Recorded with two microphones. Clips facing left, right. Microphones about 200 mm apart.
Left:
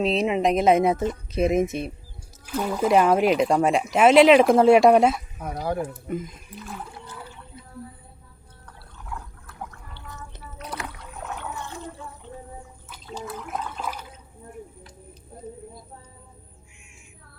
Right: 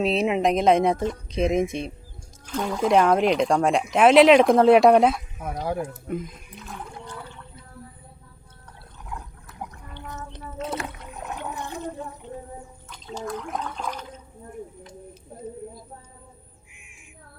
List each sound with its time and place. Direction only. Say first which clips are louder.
0.0 s speech: even; centre (ahead or behind)
9.0 s a sound: even; 15° right (ahead or behind)
10.6 s boat: right 5 dB; 25° right (ahead or behind)
13.2 s toilet flush: right 3 dB; 5° left (ahead or behind)